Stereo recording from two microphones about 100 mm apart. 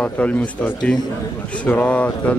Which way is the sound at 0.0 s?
10° left (ahead or behind).